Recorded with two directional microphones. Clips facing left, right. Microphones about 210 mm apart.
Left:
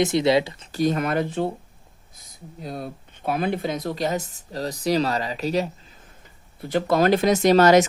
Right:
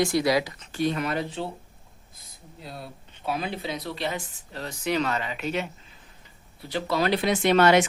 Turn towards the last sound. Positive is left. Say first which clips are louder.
# left 4 dB
turn(degrees=40)  # may be behind; listen again after turning